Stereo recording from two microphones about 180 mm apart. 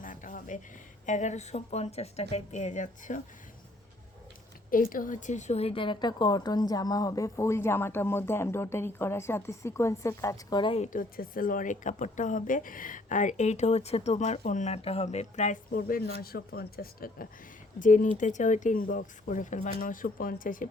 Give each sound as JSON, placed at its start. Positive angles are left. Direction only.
{"t": 0.0, "sound": "a sound", "side_deg": 45}
{"t": 1.0, "sound": "speech", "side_deg": 40}
{"t": 4.7, "sound": "a woman's voice", "side_deg": 50}
{"t": 10.9, "sound": "speech", "side_deg": 50}
{"t": 17.7, "sound": "speech", "side_deg": 45}